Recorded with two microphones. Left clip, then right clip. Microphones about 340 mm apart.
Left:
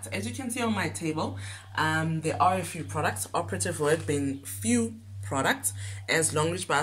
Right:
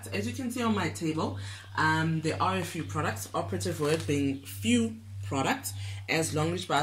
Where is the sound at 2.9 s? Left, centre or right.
Left.